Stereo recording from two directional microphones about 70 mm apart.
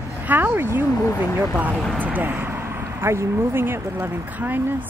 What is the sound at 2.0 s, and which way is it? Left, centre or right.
Speech, right.